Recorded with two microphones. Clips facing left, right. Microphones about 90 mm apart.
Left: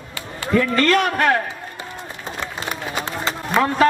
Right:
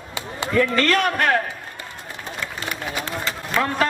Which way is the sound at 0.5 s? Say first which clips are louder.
Left 2 dB; 25° left (ahead or behind).